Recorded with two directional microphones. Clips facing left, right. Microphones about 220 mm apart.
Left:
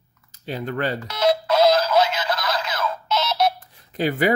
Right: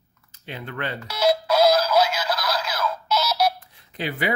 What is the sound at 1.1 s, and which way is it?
Synthetic singing, 5° right (ahead or behind).